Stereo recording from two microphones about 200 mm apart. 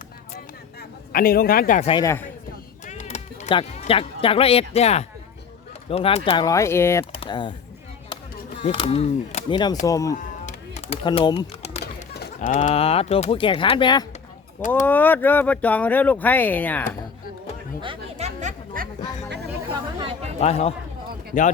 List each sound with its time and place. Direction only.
0.3 s a sound: 50° left (ahead or behind)
1.9 s speech: 20° left (ahead or behind)
2.8 s speech: 35° left (ahead or behind); by 7.0 s 10° left (ahead or behind)
7.0 s speech: 25° left (ahead or behind)
8.6 s speech: 30° left (ahead or behind)
10.4 s a sound: 30° left (ahead or behind)
12.4 s speech: 40° left (ahead or behind)
14.8 s speech: 10° left (ahead or behind)
17.7 s chatter: 25° right (ahead or behind)
18.3 s music: 40° right (ahead or behind)
20.0 s chatter: 25° right (ahead or behind)
20.4 s a man's voice: 30° left (ahead or behind)